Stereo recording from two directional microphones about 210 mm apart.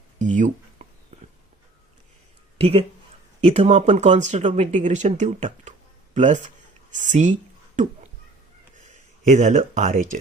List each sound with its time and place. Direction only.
0.2 s a sound: 35° right (ahead or behind)
2.6 s speech: 25° right (ahead or behind)
9.2 s speech: 35° right (ahead or behind)